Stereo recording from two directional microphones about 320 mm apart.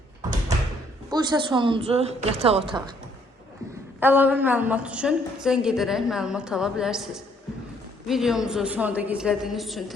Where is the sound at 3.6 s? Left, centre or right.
Centre.